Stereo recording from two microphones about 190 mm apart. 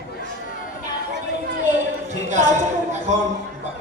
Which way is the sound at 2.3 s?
40° right (ahead or behind).